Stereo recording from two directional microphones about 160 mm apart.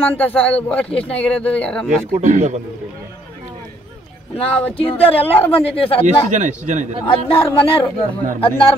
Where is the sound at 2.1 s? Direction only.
45° right (ahead or behind).